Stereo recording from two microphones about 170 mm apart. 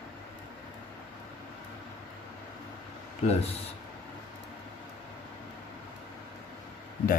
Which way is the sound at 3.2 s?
35° left (ahead or behind).